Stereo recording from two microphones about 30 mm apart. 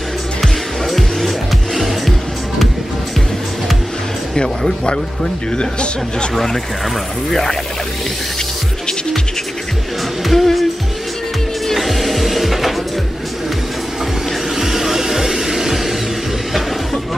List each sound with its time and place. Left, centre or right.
0.4 s music: centre
5.6 s speech: left
6.3 s speech: centre
10.2 s music: centre
11.7 s music: centre
14.6 s music: centre